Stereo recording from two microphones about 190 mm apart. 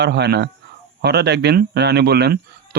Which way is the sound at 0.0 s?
65° right (ahead or behind).